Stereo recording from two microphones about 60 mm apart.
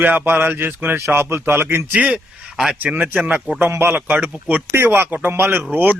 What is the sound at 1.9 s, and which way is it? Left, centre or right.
Speech, right.